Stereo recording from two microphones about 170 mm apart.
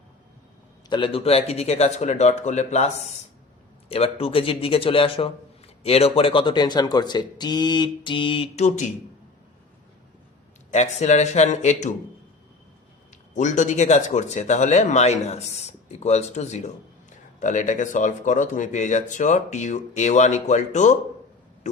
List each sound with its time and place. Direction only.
0.9 s a man's voice: 30° left (ahead or behind)
10.7 s speech: 40° left (ahead or behind)
13.3 s speech: 45° left (ahead or behind)